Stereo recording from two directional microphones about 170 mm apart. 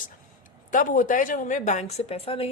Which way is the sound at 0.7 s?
50° left (ahead or behind).